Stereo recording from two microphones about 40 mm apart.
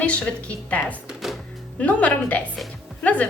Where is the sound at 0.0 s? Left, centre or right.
Left.